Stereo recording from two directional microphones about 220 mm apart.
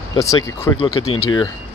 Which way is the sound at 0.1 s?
15° left (ahead or behind).